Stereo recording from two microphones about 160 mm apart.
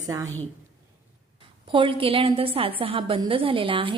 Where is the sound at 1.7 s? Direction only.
30° right (ahead or behind).